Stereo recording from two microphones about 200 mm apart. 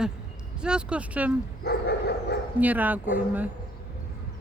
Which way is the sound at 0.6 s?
5° right (ahead or behind).